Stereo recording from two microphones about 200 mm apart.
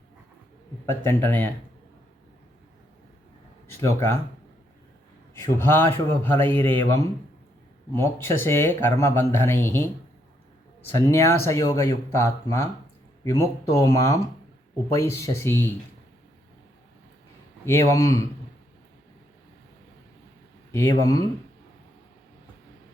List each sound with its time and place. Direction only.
0.9 s speech: 10° left (ahead or behind)
3.7 s speech: 15° left (ahead or behind)
5.3 s speech: 10° left (ahead or behind)
10.9 s speech: 15° left (ahead or behind)
17.7 s speech: 15° left (ahead or behind)
20.7 s speech: 15° left (ahead or behind)